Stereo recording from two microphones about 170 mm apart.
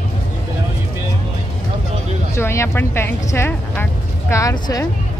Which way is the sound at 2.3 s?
15° left (ahead or behind).